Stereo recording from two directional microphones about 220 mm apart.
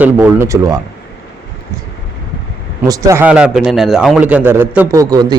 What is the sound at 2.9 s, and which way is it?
A man's voice, 15° right (ahead or behind).